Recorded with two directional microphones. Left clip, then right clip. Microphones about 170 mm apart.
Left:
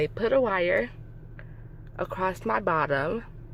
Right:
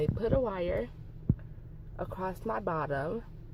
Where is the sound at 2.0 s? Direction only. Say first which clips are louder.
Left 8 dB; 25° left (ahead or behind).